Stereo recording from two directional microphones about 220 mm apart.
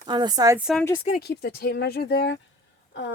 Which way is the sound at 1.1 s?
45° left (ahead or behind).